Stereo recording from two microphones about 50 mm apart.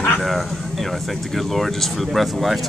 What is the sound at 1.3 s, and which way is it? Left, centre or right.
Speech, centre.